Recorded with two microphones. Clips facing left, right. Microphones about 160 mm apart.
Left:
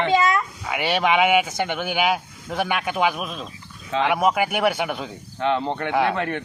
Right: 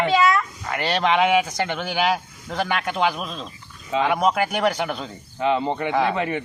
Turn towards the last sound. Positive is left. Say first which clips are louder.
# even
turn(degrees=-5)  # may be behind; listen again after turning